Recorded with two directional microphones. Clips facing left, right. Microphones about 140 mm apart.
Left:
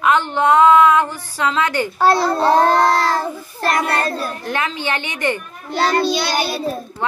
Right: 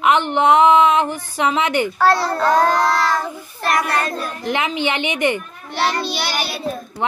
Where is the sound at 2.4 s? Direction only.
30° left (ahead or behind).